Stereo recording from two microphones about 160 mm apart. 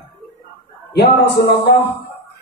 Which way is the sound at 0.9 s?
90° left.